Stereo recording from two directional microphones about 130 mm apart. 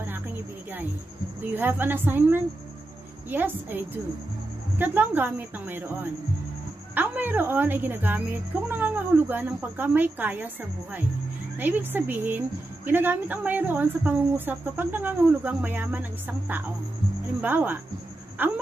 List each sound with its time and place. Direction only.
1.4 s speech: 15° right (ahead or behind)
7.0 s speech: 15° right (ahead or behind)